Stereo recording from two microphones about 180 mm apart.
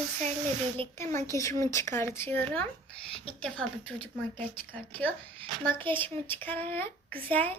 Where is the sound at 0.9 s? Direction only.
15° left (ahead or behind).